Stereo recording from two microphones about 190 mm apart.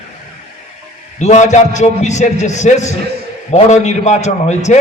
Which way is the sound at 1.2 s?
40° left (ahead or behind).